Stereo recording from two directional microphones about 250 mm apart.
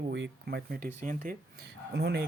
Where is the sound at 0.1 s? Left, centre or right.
Right.